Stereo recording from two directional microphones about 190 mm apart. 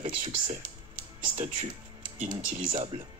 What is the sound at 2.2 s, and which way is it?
Speech, 30° right (ahead or behind).